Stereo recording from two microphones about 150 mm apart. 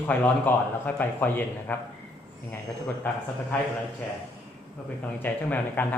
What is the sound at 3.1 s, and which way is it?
Speech, 15° left (ahead or behind).